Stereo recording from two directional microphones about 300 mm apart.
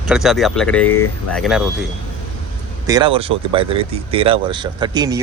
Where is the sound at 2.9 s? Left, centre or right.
Centre.